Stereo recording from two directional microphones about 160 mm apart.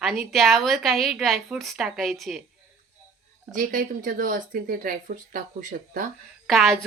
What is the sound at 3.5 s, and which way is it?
Speech, 55° right (ahead or behind).